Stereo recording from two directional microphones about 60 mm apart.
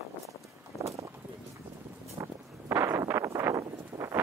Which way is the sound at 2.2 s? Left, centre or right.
Right.